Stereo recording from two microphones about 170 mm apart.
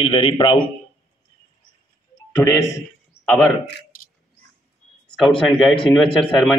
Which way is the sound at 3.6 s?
60° left (ahead or behind).